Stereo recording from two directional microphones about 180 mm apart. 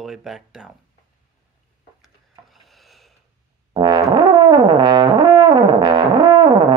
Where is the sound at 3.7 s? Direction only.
25° right (ahead or behind).